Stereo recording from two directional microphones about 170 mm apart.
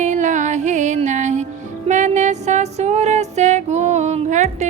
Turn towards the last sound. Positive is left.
turn(degrees=-45)  # may be behind; listen again after turning